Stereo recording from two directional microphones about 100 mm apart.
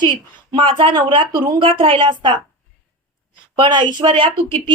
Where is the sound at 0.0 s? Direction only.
55° right (ahead or behind).